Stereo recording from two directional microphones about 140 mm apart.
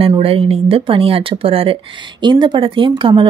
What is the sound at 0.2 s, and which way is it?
Speech, 45° right (ahead or behind).